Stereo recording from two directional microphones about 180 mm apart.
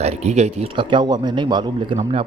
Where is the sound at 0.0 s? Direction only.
35° right (ahead or behind).